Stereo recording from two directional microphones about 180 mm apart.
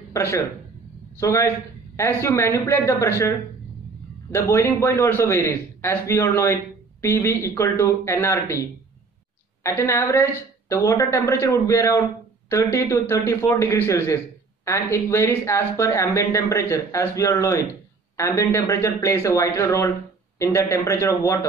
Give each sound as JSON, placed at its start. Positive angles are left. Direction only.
{"t": 0.1, "sound": "a man's voice", "side_deg": 15}
{"t": 18.1, "sound": "a sound", "side_deg": 15}
{"t": 18.5, "sound": "a man's voice", "side_deg": 15}